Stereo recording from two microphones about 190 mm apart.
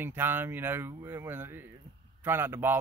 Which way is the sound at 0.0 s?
10° right (ahead or behind).